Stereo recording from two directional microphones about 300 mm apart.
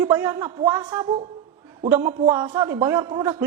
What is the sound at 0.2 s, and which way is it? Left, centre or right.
A man's voice, centre.